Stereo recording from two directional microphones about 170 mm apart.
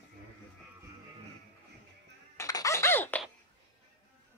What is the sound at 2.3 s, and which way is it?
Music, 20° left (ahead or behind).